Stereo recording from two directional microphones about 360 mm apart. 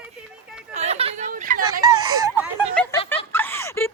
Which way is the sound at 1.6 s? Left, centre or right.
Centre.